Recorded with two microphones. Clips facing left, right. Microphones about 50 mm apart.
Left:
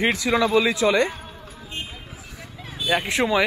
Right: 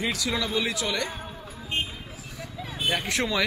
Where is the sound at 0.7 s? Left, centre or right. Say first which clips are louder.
Left 10 dB; left.